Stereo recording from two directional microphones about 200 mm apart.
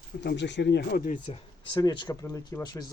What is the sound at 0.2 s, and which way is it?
Speech, 60° left (ahead or behind).